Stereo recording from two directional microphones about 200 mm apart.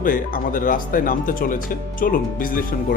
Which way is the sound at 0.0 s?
45° left (ahead or behind).